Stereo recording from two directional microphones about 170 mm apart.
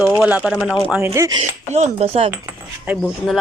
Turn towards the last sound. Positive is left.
turn(degrees=0)  # may be behind; listen again after turning